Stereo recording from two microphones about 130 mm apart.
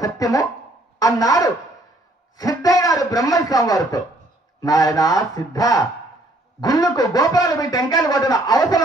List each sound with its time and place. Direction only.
0.0 s speech: 25° left (ahead or behind)